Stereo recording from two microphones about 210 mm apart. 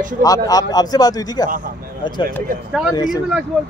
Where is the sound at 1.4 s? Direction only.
40° right (ahead or behind).